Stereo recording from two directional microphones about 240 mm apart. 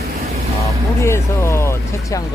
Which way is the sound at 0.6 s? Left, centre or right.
Centre.